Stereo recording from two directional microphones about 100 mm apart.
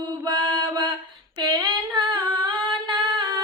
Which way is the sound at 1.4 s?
55° right (ahead or behind).